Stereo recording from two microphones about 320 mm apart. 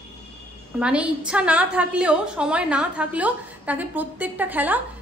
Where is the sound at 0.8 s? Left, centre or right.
Centre.